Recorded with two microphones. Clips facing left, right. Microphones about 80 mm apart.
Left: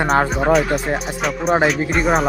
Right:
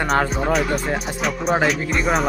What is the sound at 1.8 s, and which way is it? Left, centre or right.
Speech, left.